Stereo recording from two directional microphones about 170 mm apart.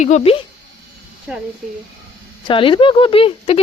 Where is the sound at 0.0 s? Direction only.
40° left (ahead or behind).